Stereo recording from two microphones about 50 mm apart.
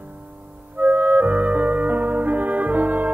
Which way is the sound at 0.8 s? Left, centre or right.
Right.